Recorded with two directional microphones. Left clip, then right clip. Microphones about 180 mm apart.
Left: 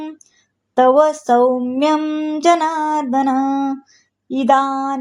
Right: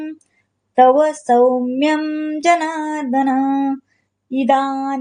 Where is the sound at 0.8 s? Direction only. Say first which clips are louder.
Even; 35° left (ahead or behind).